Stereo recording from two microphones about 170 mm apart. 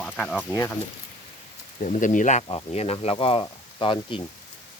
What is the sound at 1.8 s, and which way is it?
Speech, 45° left (ahead or behind).